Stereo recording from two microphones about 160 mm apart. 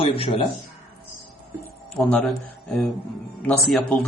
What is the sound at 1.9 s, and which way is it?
Speech, 10° left (ahead or behind).